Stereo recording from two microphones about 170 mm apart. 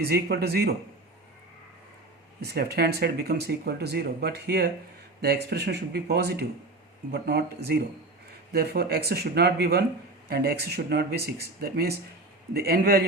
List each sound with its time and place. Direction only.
0.0 s speech: 70° right (ahead or behind)
2.4 s speech: 70° right (ahead or behind)